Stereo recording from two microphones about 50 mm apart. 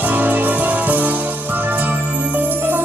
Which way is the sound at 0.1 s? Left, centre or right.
Right.